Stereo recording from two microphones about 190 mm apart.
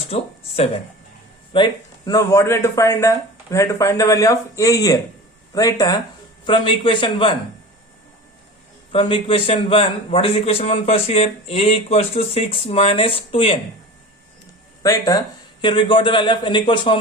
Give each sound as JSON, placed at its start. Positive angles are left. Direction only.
{"t": 0.1, "sound": "a man's voice", "side_deg": 35}
{"t": 1.5, "sound": "a man's voice", "side_deg": 20}
{"t": 8.9, "sound": "a man's voice", "side_deg": 25}
{"t": 14.8, "sound": "a man's voice", "side_deg": 20}